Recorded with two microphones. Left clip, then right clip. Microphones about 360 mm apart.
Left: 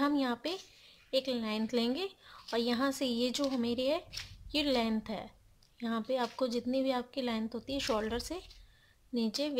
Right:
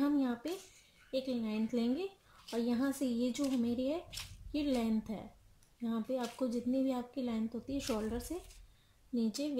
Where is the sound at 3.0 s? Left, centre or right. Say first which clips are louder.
Left 3 dB; left.